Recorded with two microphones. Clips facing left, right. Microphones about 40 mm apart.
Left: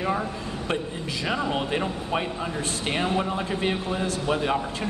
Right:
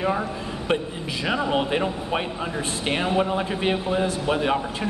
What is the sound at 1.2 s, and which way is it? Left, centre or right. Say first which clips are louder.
Speech: right 4 dB; centre.